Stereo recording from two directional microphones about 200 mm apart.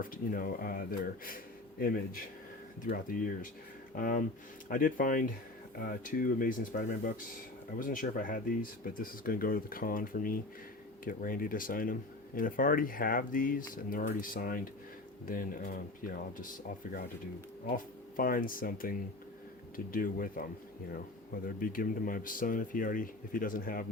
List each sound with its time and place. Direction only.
0.0 s speech: 45° left (ahead or behind)
2.8 s speech: 45° left (ahead or behind)
21.4 s speech: 45° left (ahead or behind)